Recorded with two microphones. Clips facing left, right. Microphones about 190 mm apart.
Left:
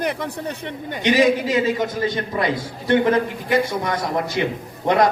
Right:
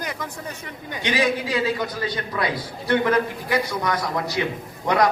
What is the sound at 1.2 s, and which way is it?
Speech, 20° left (ahead or behind).